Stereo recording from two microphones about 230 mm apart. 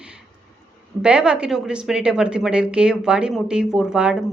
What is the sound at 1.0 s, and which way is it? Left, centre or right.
A woman's voice, centre.